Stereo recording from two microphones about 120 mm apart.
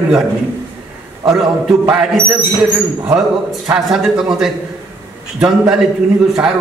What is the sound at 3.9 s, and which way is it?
A man's voice, 5° right (ahead or behind).